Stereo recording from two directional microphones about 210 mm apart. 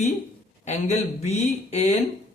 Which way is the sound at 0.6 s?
30° left (ahead or behind).